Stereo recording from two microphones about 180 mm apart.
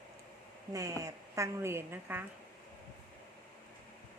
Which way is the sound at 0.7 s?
20° right (ahead or behind).